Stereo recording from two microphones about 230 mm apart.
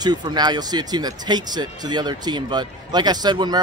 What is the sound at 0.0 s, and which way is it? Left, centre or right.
Speech, centre.